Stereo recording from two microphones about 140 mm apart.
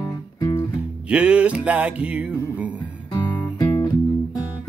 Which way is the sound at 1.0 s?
10° right (ahead or behind).